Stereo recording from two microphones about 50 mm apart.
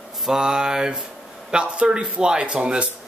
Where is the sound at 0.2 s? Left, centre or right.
Centre.